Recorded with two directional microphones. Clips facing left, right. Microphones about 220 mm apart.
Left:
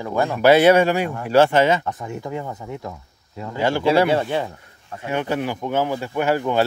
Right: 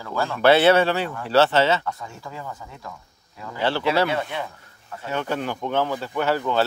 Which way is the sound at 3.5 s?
15° left (ahead or behind).